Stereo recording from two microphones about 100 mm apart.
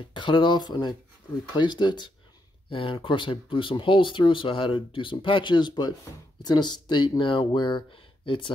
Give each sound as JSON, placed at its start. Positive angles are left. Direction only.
{"t": 0.0, "sound": "speech", "side_deg": 55}
{"t": 2.7, "sound": "speech", "side_deg": 60}